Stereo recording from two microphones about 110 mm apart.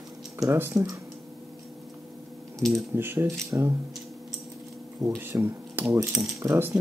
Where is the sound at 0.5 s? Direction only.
20° right (ahead or behind).